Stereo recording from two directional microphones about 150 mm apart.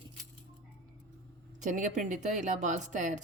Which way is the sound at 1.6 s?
55° right (ahead or behind).